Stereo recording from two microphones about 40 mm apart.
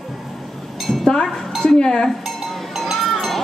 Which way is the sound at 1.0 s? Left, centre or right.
Centre.